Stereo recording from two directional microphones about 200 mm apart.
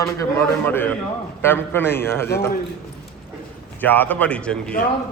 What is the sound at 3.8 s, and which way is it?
Speech, 10° left (ahead or behind).